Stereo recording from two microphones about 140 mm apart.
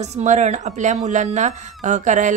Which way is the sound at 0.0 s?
55° right (ahead or behind).